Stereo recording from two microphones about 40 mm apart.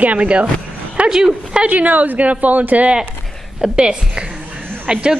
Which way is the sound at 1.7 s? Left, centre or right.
Right.